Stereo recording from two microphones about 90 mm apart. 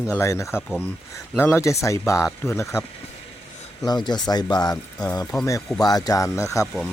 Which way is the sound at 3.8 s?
50° left (ahead or behind).